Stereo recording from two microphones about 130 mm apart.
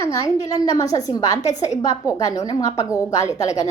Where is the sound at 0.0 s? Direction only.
25° left (ahead or behind).